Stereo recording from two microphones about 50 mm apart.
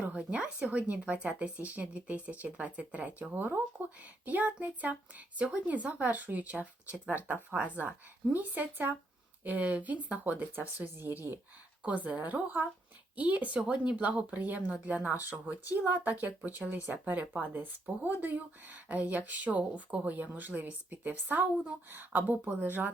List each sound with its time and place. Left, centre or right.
0.0 s speech: right
3.3 s speech: right
10.9 s speech: right
11.8 s speech: right